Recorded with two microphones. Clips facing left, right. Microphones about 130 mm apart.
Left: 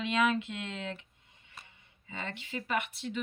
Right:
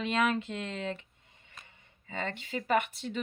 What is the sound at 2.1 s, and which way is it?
Speech, 45° right (ahead or behind).